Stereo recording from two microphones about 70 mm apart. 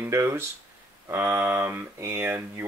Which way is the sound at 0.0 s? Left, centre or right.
Right.